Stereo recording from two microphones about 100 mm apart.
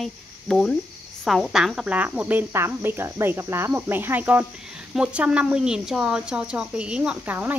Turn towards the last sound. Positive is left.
turn(degrees=-15)  # may be behind; listen again after turning